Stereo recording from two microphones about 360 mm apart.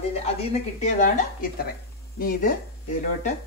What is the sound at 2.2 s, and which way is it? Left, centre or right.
Speech, left.